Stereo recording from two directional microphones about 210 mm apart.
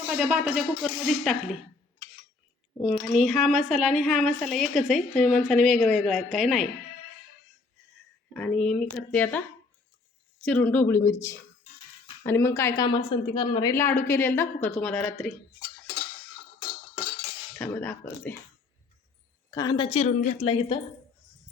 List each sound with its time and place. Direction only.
0.1 s speech: 5° right (ahead or behind)
3.1 s speech: centre (ahead or behind)
8.3 s a woman's voice: 5° left (ahead or behind)
10.4 s a woman's voice: 5° left (ahead or behind)
17.6 s a woman's voice: 10° left (ahead or behind)
19.5 s a woman's voice: 20° left (ahead or behind)